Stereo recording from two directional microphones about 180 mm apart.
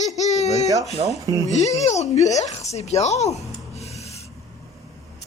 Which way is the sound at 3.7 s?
35° left (ahead or behind).